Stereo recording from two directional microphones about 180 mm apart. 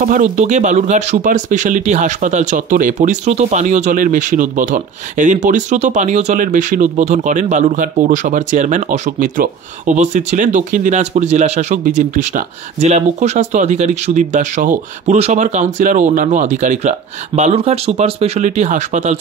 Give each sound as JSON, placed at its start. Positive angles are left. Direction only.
{"t": 0.0, "sound": "speech", "side_deg": -45}